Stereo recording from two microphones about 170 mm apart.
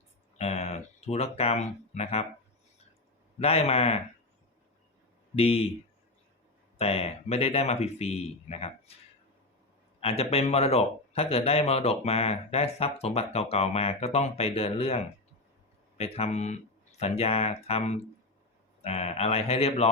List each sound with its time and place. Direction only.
0.3 s a sound: 40° left (ahead or behind)
3.4 s speech: 35° left (ahead or behind)
5.4 s speech: 35° left (ahead or behind)
6.7 s speech: 35° left (ahead or behind)
10.0 s speech: 35° left (ahead or behind)